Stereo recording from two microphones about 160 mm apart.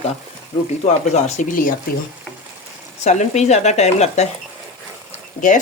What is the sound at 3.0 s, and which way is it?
Speech, 45° left (ahead or behind).